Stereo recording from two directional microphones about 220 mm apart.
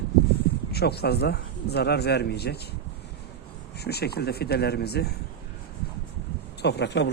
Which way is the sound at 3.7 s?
45° left (ahead or behind).